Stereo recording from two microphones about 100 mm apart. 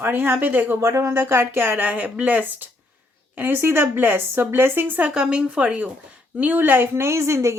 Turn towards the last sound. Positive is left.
turn(degrees=-30)  # may be behind; listen again after turning